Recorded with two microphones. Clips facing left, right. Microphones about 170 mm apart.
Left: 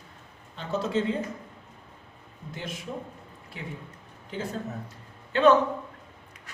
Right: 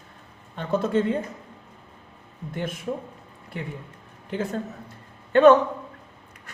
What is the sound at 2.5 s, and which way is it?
Speech, 55° right (ahead or behind).